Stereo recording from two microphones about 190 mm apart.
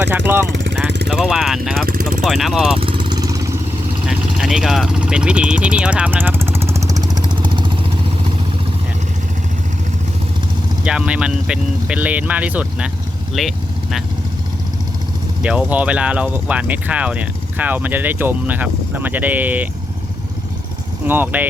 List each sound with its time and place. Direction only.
0.5 s vehicle: 65° right (ahead or behind)
1.0 s speech: 5° right (ahead or behind)
2.7 s vehicle: 30° right (ahead or behind)
4.0 s vehicle: 5° right (ahead or behind); by 7.7 s 25° right (ahead or behind)
10.8 s speech: 5° right (ahead or behind)
15.4 s speech: 5° right (ahead or behind)
21.0 s speech: 10° right (ahead or behind)